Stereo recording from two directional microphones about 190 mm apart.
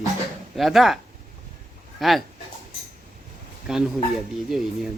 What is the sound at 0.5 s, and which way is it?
Speech, centre (ahead or behind).